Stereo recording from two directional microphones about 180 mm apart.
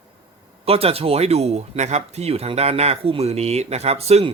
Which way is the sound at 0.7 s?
35° right (ahead or behind).